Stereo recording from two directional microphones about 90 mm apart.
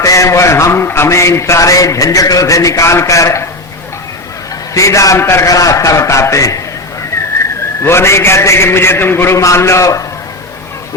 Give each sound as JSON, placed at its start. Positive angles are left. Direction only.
{"t": 0.0, "sound": "a man's voice", "side_deg": 35}
{"t": 4.7, "sound": "a man's voice", "side_deg": 35}
{"t": 5.5, "sound": "a man's voice", "side_deg": 40}
{"t": 7.9, "sound": "a man's voice", "side_deg": 30}